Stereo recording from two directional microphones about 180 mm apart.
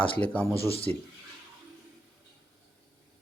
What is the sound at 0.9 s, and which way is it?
Speech, 10° left (ahead or behind).